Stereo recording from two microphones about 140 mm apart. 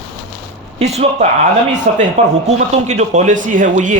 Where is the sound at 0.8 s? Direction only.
50° right (ahead or behind).